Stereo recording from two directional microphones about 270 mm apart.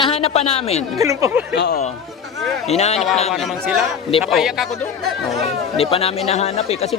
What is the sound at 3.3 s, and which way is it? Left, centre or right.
Speech, centre.